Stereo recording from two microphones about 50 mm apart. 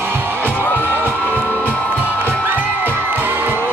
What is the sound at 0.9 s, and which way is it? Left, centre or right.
Music, right.